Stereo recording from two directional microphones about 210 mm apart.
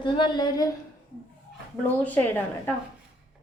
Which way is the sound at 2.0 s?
10° left (ahead or behind).